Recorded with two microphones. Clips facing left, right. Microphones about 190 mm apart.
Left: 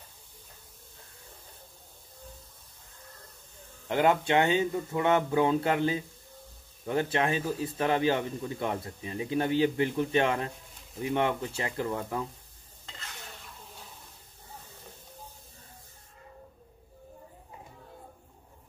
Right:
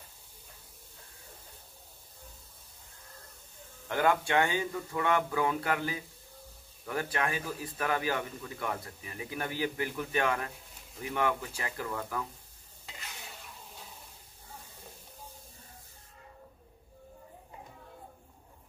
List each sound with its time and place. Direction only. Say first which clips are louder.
3.9 s a man's voice: left 3 dB; 20° left (ahead or behind)
12.8 s stir: left 1 dB; 10° right (ahead or behind)